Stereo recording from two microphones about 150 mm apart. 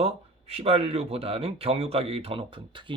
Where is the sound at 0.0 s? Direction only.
40° right (ahead or behind).